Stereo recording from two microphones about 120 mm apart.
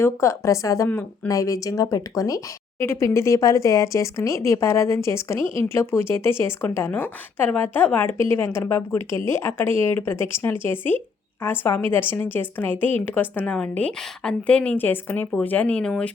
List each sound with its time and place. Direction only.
0.0 s speech: 25° left (ahead or behind)
0.9 s a woman's voice: 15° left (ahead or behind)
1.3 s a woman's voice: 25° left (ahead or behind); by 16.1 s 10° left (ahead or behind)